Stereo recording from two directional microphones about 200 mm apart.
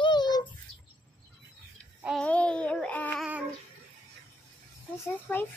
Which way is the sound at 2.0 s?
Centre (ahead or behind).